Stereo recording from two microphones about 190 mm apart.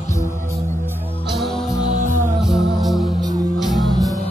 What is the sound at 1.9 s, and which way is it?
Music, 40° right (ahead or behind).